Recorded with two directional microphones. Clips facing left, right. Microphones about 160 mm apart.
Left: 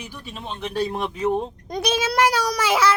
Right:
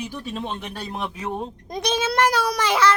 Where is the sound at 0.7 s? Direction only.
10° left (ahead or behind).